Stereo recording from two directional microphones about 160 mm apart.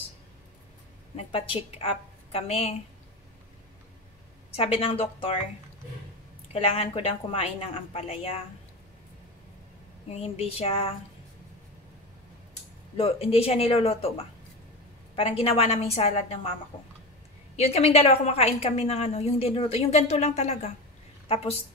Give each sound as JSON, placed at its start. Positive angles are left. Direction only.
{"t": 1.1, "sound": "a woman's voice", "side_deg": 35}
{"t": 4.5, "sound": "a woman's voice", "side_deg": 35}
{"t": 6.5, "sound": "a woman's voice", "side_deg": 40}
{"t": 10.0, "sound": "a woman's voice", "side_deg": 40}
{"t": 12.9, "sound": "a woman's voice", "side_deg": 40}
{"t": 17.6, "sound": "a woman's voice", "side_deg": 40}